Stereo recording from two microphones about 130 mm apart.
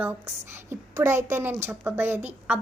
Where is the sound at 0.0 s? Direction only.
15° right (ahead or behind).